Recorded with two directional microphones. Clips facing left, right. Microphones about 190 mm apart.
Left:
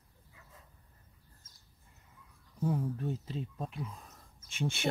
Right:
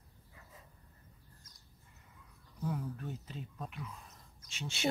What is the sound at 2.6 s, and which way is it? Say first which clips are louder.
Speech: left 6 dB; 30° left (ahead or behind).